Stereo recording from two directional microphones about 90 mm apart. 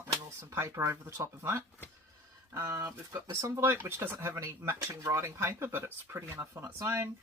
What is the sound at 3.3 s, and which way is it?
Speech, 30° right (ahead or behind).